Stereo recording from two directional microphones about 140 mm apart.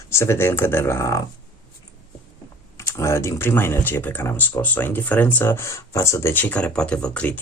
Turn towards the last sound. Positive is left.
turn(degrees=10)  # may be behind; listen again after turning